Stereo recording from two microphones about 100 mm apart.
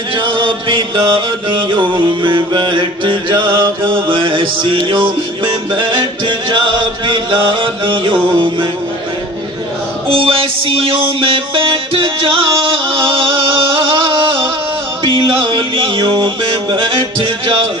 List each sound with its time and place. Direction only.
0.1 s chant: 55° right (ahead or behind)
10.0 s music: 60° right (ahead or behind)